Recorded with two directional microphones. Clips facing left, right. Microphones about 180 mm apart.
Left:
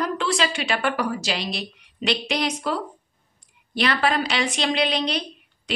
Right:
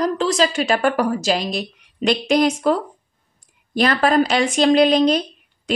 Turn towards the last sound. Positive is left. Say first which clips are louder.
# right 7 dB
turn(degrees=-45)  # may be behind; listen again after turning